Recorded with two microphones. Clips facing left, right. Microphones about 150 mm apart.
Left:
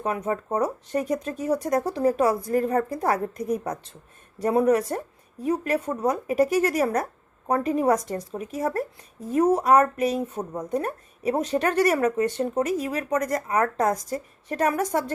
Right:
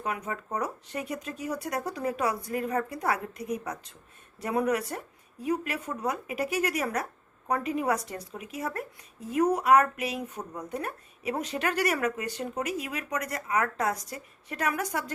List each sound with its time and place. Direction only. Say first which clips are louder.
0.0 s speech: left 7 dB; 35° left (ahead or behind)